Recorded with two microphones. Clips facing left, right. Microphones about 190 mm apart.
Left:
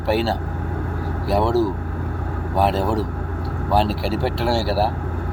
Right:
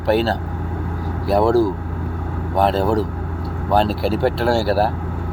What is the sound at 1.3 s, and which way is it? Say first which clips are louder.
Speech: right 4 dB; 5° left (ahead or behind).